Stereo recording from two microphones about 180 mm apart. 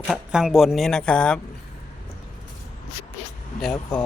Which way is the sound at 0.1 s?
5° right (ahead or behind).